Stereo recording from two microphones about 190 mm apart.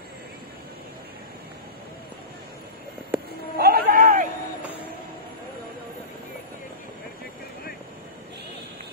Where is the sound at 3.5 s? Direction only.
55° right (ahead or behind).